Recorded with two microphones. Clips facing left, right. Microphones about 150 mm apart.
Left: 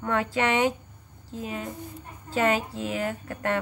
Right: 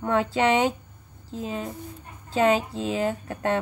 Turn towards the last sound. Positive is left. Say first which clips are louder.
# right 3 dB
turn(degrees=-20)  # may be behind; listen again after turning